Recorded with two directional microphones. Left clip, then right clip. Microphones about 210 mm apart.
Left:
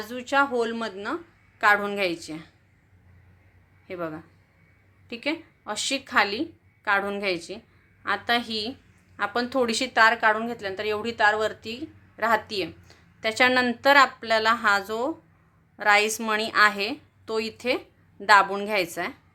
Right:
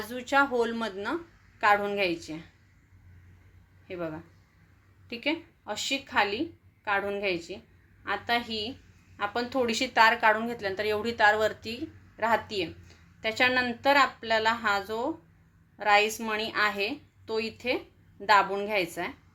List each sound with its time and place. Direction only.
0.0 s a woman's voice: 10° left (ahead or behind)
3.8 s a woman's voice: 20° left (ahead or behind)